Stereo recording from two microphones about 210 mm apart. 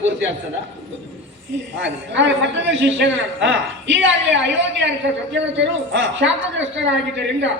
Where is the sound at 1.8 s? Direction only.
60° right (ahead or behind).